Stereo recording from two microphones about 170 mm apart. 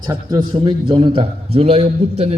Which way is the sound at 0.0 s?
25° right (ahead or behind).